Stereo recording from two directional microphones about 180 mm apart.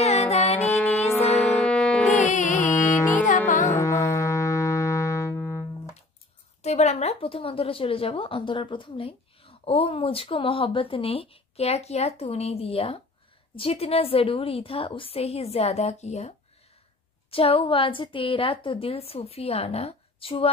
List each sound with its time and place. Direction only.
0.0 s music: 35° left (ahead or behind)
0.7 s music: 10° left (ahead or behind)
2.1 s music: 40° left (ahead or behind)
3.7 s music: 15° left (ahead or behind)
6.6 s a woman's voice: 35° left (ahead or behind)